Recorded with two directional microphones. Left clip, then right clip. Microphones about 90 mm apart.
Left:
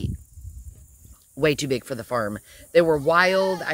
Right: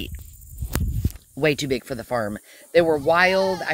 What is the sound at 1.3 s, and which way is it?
Speech, 55° left (ahead or behind).